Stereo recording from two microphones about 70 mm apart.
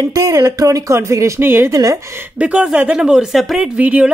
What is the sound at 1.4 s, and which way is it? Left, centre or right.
Speech, right.